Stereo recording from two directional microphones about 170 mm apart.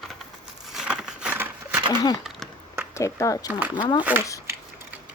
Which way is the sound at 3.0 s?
20° left (ahead or behind).